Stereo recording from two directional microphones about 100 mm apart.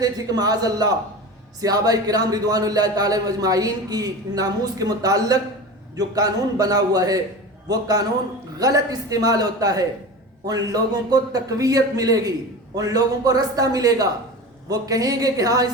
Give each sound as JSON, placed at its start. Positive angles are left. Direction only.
{"t": 0.0, "sound": "a man's voice", "side_deg": -40}